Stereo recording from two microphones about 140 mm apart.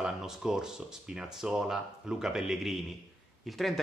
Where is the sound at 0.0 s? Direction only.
5° right (ahead or behind).